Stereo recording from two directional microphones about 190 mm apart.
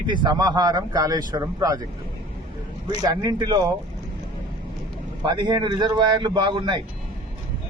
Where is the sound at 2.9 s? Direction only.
20° right (ahead or behind).